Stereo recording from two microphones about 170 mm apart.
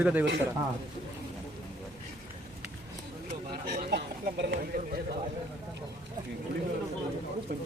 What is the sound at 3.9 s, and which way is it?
Speech, 85° right.